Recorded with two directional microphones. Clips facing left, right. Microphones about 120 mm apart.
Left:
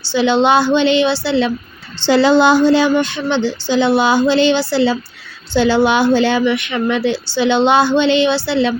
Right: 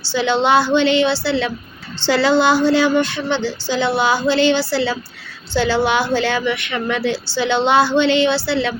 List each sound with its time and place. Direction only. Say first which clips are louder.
0.1 s a woman's voice: left 3 dB; 15° left (ahead or behind)